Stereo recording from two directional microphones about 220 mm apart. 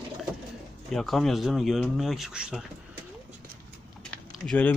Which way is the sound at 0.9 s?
Centre (ahead or behind).